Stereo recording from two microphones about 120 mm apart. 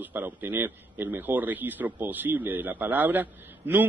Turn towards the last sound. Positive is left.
turn(degrees=-15)  # may be behind; listen again after turning